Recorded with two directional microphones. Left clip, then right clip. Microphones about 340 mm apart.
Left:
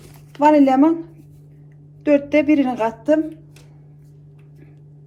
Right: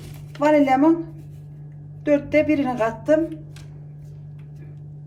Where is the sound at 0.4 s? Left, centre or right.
Left.